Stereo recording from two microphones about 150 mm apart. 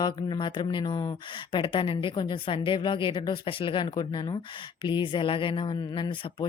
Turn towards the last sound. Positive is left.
turn(degrees=35)  # may be behind; listen again after turning